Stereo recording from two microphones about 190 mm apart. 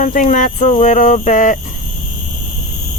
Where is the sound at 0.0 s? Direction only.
45° left (ahead or behind).